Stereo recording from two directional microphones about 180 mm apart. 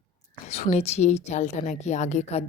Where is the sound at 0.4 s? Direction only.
35° left (ahead or behind).